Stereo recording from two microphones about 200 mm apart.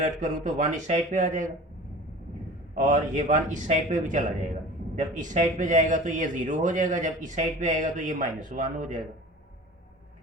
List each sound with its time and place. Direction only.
0.0 s speech: 40° right (ahead or behind)
2.7 s speech: 40° right (ahead or behind)